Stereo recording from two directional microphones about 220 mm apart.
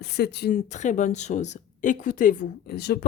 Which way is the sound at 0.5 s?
35° left (ahead or behind).